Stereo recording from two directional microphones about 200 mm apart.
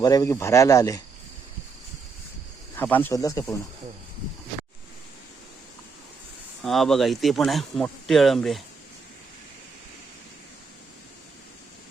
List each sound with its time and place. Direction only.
0.0 s speech: 20° left (ahead or behind)
2.7 s speech: 10° left (ahead or behind)
6.6 s speech: centre (ahead or behind)